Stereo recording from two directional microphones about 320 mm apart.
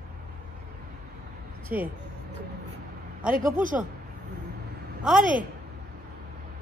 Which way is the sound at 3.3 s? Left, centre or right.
Right.